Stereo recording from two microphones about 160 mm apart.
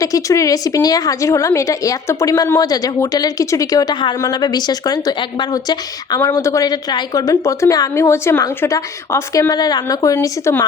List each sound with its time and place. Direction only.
0.0 s a woman's voice: 20° left (ahead or behind)
6.1 s a woman's voice: 15° left (ahead or behind)